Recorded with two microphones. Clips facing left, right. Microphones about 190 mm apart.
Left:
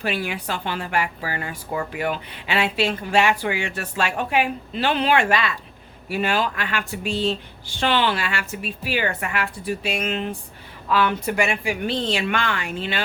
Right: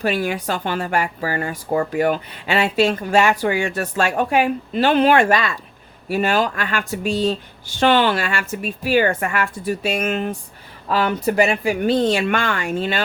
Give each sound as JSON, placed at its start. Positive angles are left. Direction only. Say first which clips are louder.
{"t": 0.0, "sound": "speech", "louder": "right 5 dB", "side_deg": -45}